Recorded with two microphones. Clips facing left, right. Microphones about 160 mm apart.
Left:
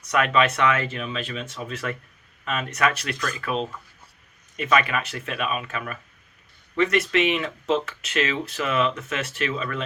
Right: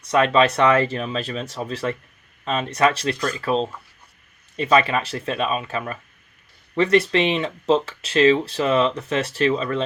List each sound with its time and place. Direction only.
0.0 s speech: 30° right (ahead or behind)